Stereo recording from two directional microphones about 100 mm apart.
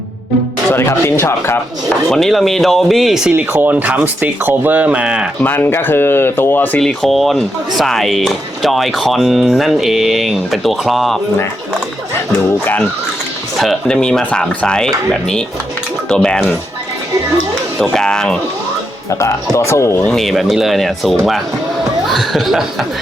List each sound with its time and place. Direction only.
0.7 s speech: 25° left (ahead or behind)
2.0 s speech: 5° left (ahead or behind)
3.3 s speech: 20° right (ahead or behind)
5.4 s speech: 20° left (ahead or behind)
6.7 s speech: 5° left (ahead or behind)
13.6 s speech: 5° left (ahead or behind)
16.0 s speech: 10° left (ahead or behind)
17.9 s speech: 5° left (ahead or behind)
19.1 s speech: 30° left (ahead or behind)
20.1 s speech: 5° left (ahead or behind)